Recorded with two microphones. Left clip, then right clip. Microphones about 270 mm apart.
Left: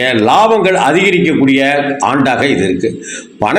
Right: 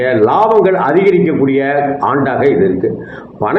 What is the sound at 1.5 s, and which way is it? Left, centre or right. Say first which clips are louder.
A man's voice: left 1 dB; left.